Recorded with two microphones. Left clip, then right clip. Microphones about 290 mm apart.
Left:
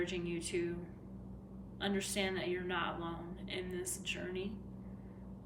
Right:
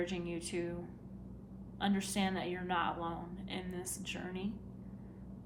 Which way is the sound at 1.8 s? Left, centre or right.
Centre.